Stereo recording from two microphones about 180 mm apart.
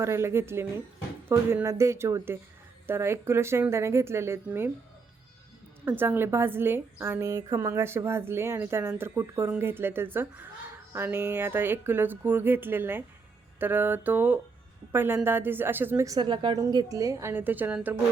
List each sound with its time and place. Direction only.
0.0 s a woman's voice: 15° right (ahead or behind)
5.8 s a woman's voice: 10° right (ahead or behind)